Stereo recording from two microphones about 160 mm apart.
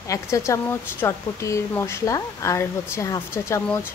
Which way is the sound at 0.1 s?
20° left (ahead or behind).